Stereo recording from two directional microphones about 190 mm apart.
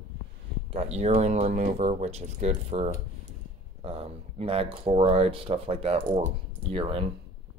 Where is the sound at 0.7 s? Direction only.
35° right (ahead or behind).